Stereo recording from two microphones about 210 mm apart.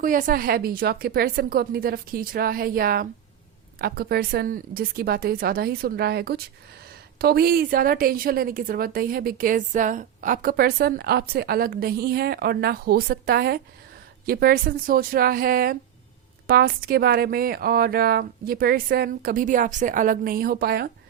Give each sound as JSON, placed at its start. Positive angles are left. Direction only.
{"t": 0.0, "sound": "a woman's voice", "side_deg": -40}